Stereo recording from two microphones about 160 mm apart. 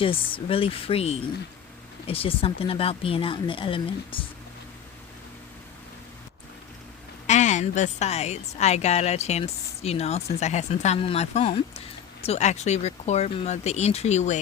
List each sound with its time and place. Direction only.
0.0 s speech: 35° left (ahead or behind)
7.3 s a woman's voice: 50° left (ahead or behind)